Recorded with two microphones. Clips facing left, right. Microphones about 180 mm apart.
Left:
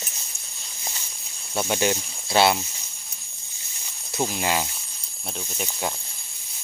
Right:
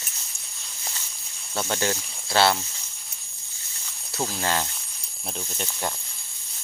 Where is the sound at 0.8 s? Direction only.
15° left (ahead or behind).